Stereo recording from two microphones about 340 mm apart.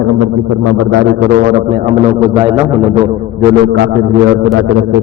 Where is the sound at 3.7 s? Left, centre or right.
Right.